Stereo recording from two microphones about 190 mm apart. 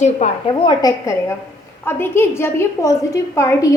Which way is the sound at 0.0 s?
35° left (ahead or behind).